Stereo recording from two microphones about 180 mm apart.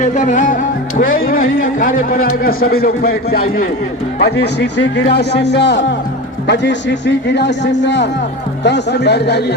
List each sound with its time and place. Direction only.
0.0 s music: 45° left (ahead or behind); by 3.6 s 60° left (ahead or behind)
4.2 s a man's voice: 70° left (ahead or behind)